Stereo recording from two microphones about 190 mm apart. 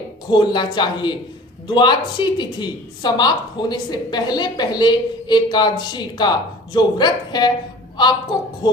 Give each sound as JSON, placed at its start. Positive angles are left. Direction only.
{"t": 0.3, "sound": "a woman's voice", "side_deg": 25}